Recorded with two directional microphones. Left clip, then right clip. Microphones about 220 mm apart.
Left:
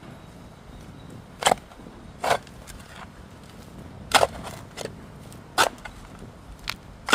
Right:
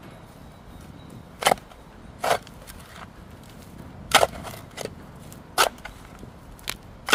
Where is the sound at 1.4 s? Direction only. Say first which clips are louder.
Even; 15° right (ahead or behind).